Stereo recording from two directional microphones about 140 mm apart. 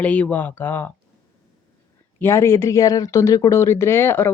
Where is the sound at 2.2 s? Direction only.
20° left (ahead or behind).